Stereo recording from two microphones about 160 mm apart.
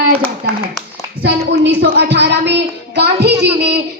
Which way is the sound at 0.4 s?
80° right.